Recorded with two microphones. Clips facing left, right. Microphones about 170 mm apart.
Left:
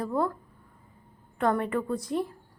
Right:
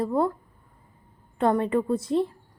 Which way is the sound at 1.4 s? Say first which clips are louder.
Right 4 dB; 20° right (ahead or behind).